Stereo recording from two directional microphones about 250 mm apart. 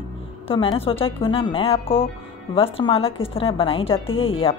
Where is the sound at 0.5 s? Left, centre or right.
Left.